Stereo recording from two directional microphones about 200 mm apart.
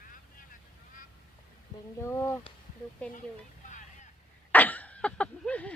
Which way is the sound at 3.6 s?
40° left (ahead or behind).